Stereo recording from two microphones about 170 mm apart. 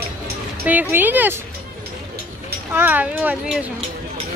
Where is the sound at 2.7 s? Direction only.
10° right (ahead or behind).